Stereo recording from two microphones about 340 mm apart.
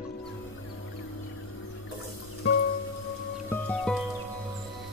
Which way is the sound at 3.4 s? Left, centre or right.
Centre.